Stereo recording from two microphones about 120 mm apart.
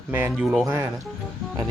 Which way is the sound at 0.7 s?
25° right (ahead or behind).